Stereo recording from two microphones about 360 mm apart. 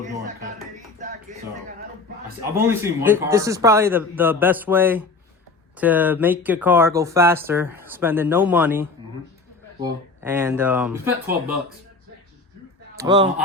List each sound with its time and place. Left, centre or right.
2.4 s speech: centre
13.0 s speech: centre